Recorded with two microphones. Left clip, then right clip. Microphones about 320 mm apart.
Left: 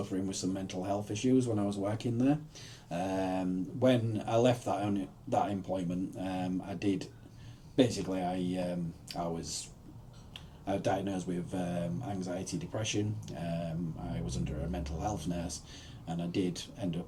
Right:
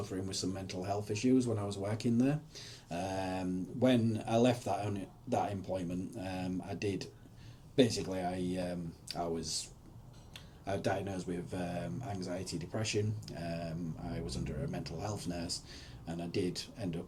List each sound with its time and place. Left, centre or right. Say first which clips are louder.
0.3 s speech: left 2 dB; right